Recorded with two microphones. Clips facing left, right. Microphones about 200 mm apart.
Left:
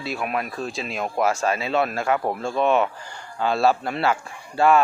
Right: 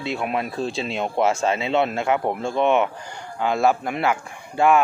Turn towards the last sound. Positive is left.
turn(degrees=-15)  # may be behind; listen again after turning